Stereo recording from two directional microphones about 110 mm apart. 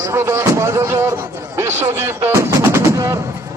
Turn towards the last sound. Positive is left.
turn(degrees=-25)  # may be behind; listen again after turning